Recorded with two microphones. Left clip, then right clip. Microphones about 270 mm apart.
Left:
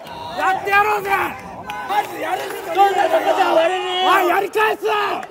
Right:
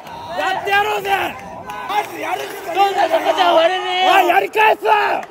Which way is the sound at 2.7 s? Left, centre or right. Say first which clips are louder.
Even; right.